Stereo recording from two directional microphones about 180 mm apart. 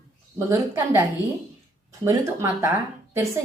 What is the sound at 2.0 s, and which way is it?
Speech, 15° right (ahead or behind).